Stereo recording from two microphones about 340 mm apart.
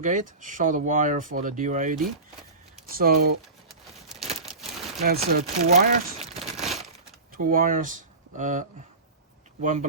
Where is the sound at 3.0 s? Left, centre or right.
Right.